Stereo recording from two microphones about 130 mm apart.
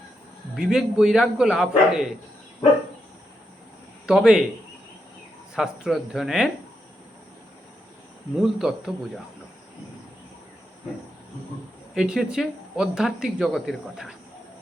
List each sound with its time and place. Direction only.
0.5 s speech: 5° right (ahead or behind)
4.0 s speech: 5° right (ahead or behind)
5.5 s speech: 5° right (ahead or behind)
8.4 s speech: 5° right (ahead or behind)
11.9 s speech: 5° right (ahead or behind)